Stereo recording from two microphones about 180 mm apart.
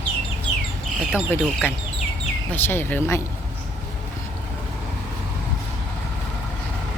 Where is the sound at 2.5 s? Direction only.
10° left (ahead or behind).